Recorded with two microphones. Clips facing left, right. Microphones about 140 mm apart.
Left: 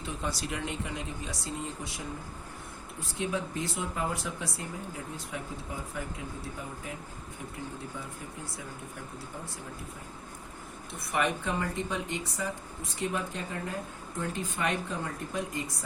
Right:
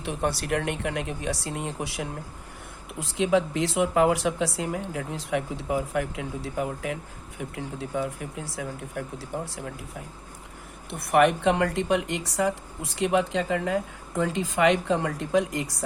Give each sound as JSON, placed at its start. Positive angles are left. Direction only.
{"t": 0.0, "sound": "speech", "side_deg": -65}
{"t": 3.0, "sound": "speech", "side_deg": -90}
{"t": 10.9, "sound": "speech", "side_deg": -65}